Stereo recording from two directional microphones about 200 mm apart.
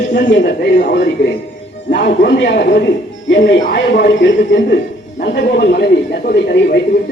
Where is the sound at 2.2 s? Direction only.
60° left (ahead or behind).